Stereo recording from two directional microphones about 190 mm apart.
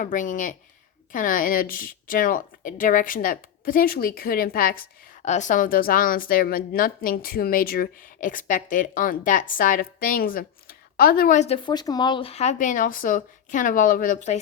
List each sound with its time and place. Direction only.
0.0 s a woman's voice: 45° left (ahead or behind)
5.2 s a woman's voice: 40° left (ahead or behind)